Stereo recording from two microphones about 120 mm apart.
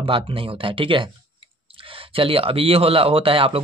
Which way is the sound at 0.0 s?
50° right (ahead or behind).